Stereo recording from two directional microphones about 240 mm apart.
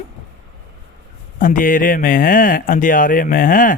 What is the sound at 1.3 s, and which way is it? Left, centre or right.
Speech, left.